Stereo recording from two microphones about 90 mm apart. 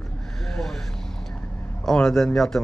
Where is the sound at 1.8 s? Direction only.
5° left (ahead or behind).